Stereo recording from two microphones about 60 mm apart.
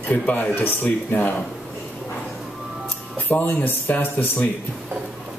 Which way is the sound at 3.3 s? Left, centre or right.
Left.